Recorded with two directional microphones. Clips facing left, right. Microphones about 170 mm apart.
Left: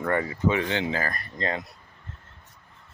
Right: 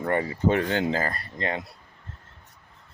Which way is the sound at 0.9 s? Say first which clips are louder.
Right 2 dB; 30° right (ahead or behind).